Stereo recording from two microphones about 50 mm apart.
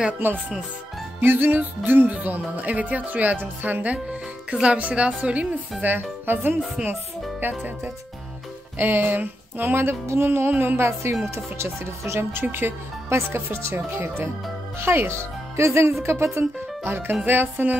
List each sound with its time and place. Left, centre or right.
0.2 s speech: right
1.5 s speech: right
5.8 s speech: right
8.7 s speech: right
13.1 s speech: right
13.7 s speech: right
15.5 s speech: right
16.3 s speech: right